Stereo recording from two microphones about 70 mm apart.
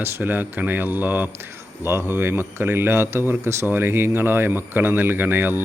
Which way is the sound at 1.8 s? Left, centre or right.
Right.